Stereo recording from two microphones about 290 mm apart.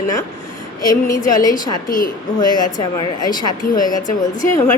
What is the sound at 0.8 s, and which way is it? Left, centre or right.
A woman's voice, centre.